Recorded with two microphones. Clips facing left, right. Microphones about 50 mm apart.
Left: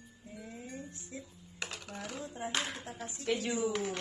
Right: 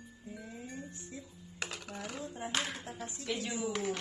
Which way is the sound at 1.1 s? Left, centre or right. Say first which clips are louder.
Left 3 dB; left.